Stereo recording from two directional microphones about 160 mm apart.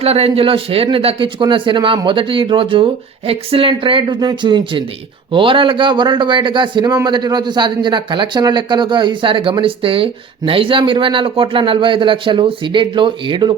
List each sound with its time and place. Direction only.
0.0 s a man's voice: 40° right (ahead or behind)